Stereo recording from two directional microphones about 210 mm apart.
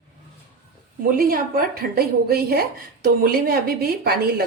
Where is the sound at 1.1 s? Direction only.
45° right (ahead or behind).